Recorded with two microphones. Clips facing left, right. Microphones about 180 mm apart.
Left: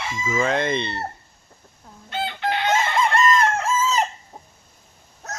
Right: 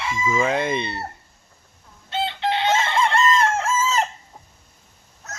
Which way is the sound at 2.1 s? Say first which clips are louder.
Right 2 dB; 25° right (ahead or behind).